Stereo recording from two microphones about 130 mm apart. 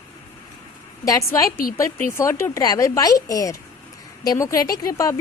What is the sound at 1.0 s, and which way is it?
A woman's voice, 25° left (ahead or behind).